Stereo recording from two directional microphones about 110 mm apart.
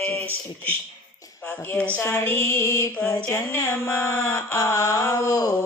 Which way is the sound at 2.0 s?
20° left (ahead or behind).